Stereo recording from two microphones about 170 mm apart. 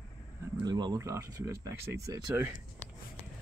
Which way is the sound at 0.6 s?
25° right (ahead or behind).